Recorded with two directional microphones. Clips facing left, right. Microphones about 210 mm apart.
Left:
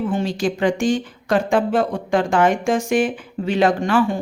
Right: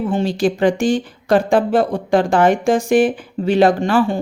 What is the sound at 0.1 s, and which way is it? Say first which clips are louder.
Speech: right 4 dB; 35° right (ahead or behind).